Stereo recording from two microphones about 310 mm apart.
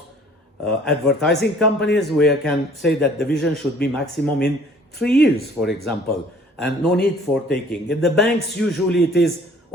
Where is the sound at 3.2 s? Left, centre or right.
Left.